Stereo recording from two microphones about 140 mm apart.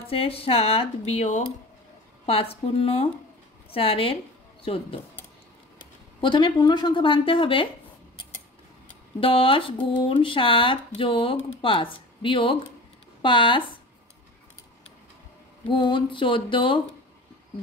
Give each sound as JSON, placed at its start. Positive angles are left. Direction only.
{"t": 0.1, "sound": "speech", "side_deg": 45}
{"t": 6.2, "sound": "speech", "side_deg": 35}
{"t": 9.2, "sound": "speech", "side_deg": 40}
{"t": 15.7, "sound": "speech", "side_deg": 35}